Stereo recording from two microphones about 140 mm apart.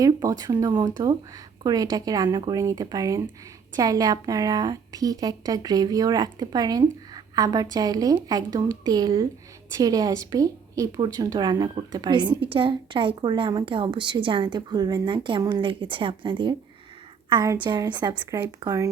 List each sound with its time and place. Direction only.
0.0 s a woman's voice: 25° right (ahead or behind)